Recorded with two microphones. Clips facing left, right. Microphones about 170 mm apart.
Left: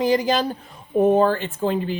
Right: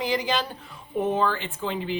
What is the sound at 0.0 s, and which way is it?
Speech, 45° left (ahead or behind).